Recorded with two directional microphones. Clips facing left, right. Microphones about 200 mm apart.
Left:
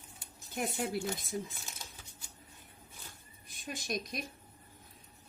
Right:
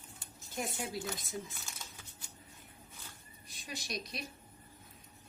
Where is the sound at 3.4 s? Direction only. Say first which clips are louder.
Left 5 dB; 50° left (ahead or behind).